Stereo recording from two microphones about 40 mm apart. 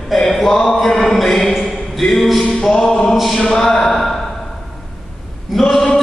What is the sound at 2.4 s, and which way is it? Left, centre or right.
Mantra, left.